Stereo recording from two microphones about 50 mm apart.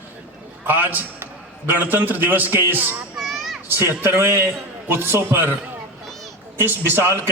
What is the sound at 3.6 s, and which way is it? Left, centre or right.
A man's voice, right.